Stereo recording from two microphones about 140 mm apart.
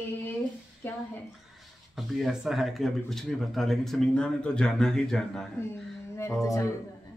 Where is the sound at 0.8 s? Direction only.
15° left (ahead or behind).